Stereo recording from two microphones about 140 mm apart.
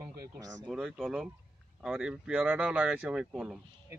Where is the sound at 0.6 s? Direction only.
5° right (ahead or behind).